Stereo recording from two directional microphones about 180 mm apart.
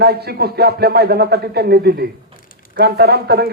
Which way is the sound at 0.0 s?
60° right (ahead or behind).